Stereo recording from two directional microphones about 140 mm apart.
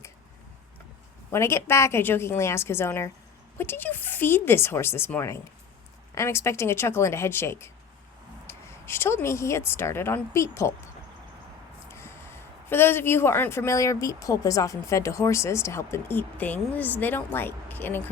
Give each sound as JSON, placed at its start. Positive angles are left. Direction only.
{"t": 1.3, "sound": "a woman's voice", "side_deg": 20}
{"t": 8.4, "sound": "a sound", "side_deg": 20}
{"t": 9.2, "sound": "a woman's voice", "side_deg": 20}
{"t": 11.9, "sound": "speech", "side_deg": 20}